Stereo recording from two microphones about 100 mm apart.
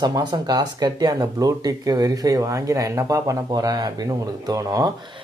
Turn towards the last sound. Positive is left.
turn(degrees=-35)  # may be behind; listen again after turning